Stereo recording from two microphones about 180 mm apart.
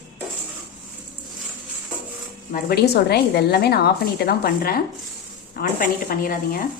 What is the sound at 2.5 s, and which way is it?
A woman's voice, 60° left (ahead or behind).